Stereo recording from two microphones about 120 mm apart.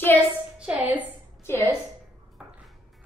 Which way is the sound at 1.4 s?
20° left (ahead or behind).